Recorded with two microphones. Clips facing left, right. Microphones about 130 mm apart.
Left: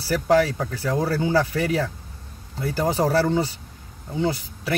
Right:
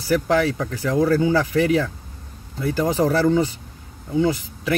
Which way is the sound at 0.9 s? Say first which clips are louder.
Right 4 dB; 30° left (ahead or behind).